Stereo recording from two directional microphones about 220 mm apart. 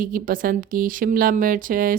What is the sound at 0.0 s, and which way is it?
Speech, 40° right (ahead or behind).